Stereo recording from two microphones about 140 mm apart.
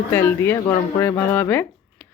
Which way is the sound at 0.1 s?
15° left (ahead or behind).